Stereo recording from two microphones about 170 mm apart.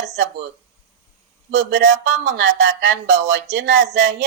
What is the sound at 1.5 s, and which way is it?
Speech, 90° right.